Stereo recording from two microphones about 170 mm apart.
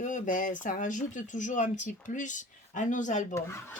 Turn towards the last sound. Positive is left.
turn(degrees=45)  # may be behind; listen again after turning